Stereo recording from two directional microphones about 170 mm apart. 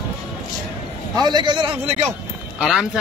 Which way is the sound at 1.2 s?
25° right (ahead or behind).